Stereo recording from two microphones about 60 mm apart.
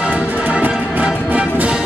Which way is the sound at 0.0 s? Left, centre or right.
Right.